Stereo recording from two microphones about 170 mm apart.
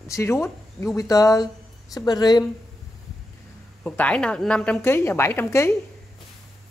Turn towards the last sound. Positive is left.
turn(degrees=15)  # may be behind; listen again after turning